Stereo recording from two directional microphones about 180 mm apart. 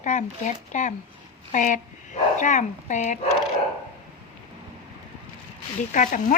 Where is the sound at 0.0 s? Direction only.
40° left (ahead or behind).